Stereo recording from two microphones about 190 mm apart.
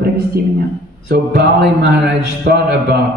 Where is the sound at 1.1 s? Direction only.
60° right (ahead or behind).